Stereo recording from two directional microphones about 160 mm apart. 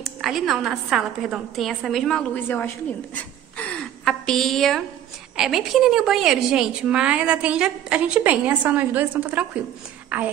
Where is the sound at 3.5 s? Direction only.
5° left (ahead or behind).